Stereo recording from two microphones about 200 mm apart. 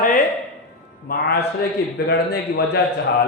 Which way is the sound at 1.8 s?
55° left (ahead or behind).